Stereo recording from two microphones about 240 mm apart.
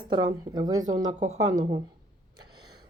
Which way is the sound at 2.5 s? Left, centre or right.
Centre.